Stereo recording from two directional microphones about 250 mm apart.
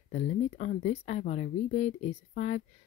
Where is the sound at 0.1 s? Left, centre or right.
Left.